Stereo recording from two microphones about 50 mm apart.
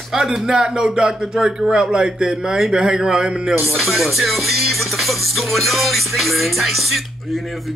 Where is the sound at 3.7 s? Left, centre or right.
Centre.